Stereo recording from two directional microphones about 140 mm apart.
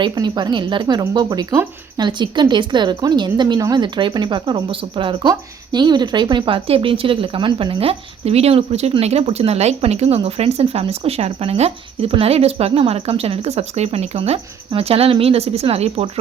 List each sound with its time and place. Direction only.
0.0 s a woman's voice: 30° right (ahead or behind); by 16.0 s 45° right (ahead or behind)